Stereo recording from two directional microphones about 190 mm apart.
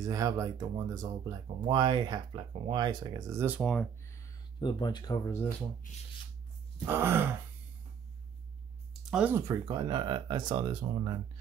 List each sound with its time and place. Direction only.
0.0 s speech: 15° right (ahead or behind)
4.0 s speech: 15° left (ahead or behind)
6.9 s wail: 10° right (ahead or behind)
9.0 s speech: 5° right (ahead or behind); by 10.9 s 25° right (ahead or behind)